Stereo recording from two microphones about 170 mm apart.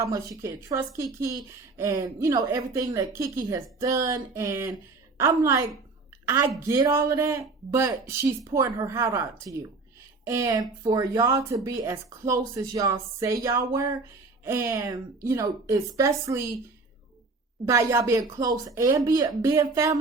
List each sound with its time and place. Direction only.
0.0 s a woman's voice: 20° right (ahead or behind)
17.7 s a woman's voice: 15° right (ahead or behind)